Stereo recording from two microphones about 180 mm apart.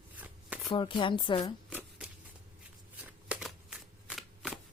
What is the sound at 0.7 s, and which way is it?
Speech, 25° left (ahead or behind).